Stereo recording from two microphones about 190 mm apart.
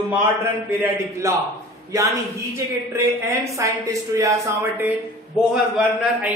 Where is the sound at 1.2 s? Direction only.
15° right (ahead or behind).